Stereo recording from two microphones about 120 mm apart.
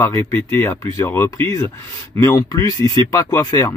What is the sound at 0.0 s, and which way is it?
Speech, 20° left (ahead or behind).